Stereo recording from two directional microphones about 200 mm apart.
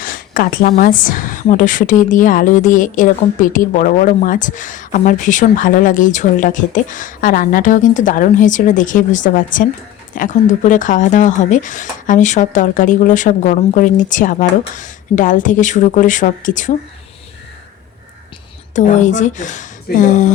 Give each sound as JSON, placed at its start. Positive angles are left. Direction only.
{"t": 0.0, "sound": "a sound", "side_deg": 45}
{"t": 0.8, "sound": "a woman's voice", "side_deg": 40}
{"t": 18.7, "sound": "a woman's voice", "side_deg": 35}